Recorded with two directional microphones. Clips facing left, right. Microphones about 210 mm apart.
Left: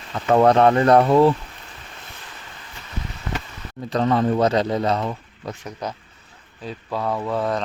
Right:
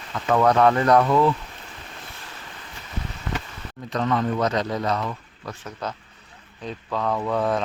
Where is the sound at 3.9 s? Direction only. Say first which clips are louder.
Left 4 dB; 35° left (ahead or behind).